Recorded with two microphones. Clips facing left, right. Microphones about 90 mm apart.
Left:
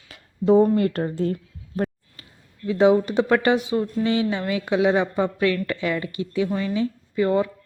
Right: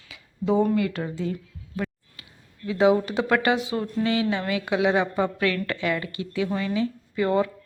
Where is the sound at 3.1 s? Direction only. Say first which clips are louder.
Left 3 dB; 20° left (ahead or behind).